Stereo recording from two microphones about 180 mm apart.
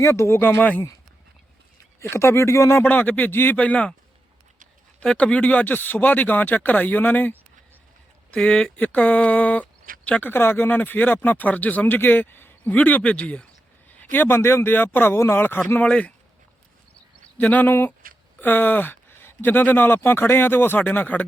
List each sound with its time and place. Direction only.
0.0 s speech: 15° left (ahead or behind)
2.0 s speech: 15° left (ahead or behind)
4.9 s speech: 5° left (ahead or behind)
17.2 s speech: 10° left (ahead or behind)